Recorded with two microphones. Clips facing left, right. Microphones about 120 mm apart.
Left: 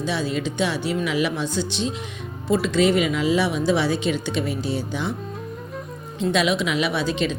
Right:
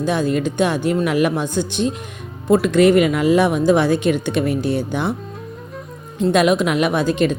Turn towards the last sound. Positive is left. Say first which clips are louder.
# right 6 dB
turn(degrees=-50)  # may be behind; listen again after turning